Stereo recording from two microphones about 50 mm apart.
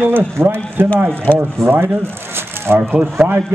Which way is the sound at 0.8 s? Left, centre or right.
Right.